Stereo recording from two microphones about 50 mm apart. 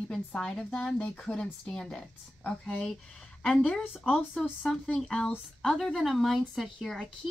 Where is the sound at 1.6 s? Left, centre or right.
Centre.